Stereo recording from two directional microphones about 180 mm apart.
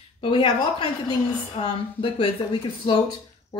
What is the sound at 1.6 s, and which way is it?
A woman's voice, 30° left (ahead or behind).